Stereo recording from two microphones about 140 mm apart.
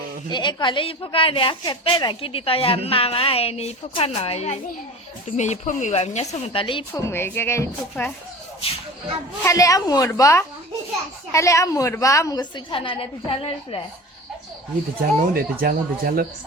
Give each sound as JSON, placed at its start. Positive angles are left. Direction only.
{"t": 0.3, "sound": "a woman's voice", "side_deg": 35}
{"t": 5.4, "sound": "speech", "side_deg": 60}
{"t": 6.9, "sound": "a woman's voice", "side_deg": 15}
{"t": 8.6, "sound": "speech", "side_deg": 45}
{"t": 9.4, "sound": "a woman's voice", "side_deg": 25}
{"t": 15.2, "sound": "speech", "side_deg": -90}